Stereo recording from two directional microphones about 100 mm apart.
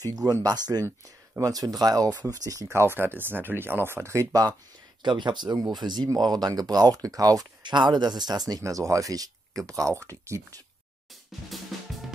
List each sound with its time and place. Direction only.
0.0 s speech: 40° right (ahead or behind)
0.8 s speech: 25° right (ahead or behind)
1.5 s speech: 40° right (ahead or behind)
5.0 s speech: 50° right (ahead or behind); by 10.6 s 30° right (ahead or behind)
11.4 s drum kit: centre (ahead or behind)